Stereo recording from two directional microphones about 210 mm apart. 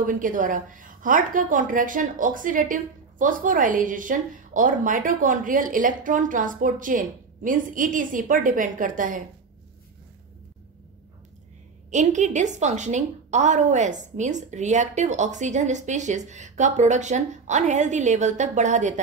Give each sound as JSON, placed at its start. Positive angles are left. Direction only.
{"t": 0.0, "sound": "a woman's voice", "side_deg": -40}
{"t": 11.9, "sound": "a woman's voice", "side_deg": -35}